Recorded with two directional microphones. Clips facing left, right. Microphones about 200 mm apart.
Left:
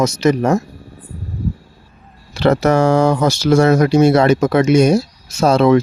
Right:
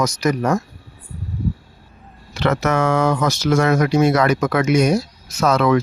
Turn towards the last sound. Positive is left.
turn(degrees=30)  # may be behind; listen again after turning